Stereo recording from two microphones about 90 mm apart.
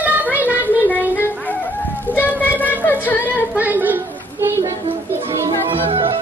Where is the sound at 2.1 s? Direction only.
20° left (ahead or behind).